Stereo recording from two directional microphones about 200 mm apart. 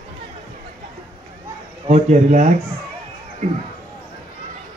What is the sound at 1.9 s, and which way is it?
Speech, 35° right (ahead or behind).